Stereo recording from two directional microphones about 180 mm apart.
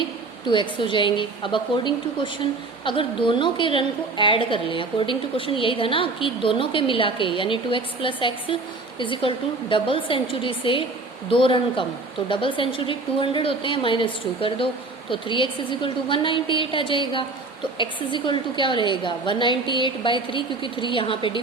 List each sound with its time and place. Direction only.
0.4 s a woman's voice: 25° left (ahead or behind)